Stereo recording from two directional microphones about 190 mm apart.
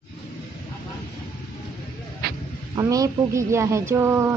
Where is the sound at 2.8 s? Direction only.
15° right (ahead or behind).